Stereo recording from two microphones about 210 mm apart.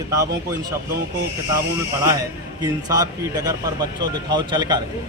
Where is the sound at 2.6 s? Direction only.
20° right (ahead or behind).